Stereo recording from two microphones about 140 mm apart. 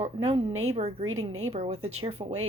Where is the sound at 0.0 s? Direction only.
50° right (ahead or behind).